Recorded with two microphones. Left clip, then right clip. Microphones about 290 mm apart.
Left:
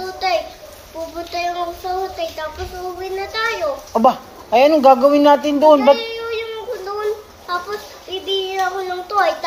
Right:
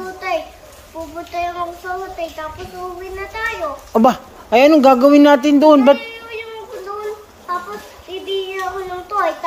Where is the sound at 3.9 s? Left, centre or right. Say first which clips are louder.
Right 1 dB; right.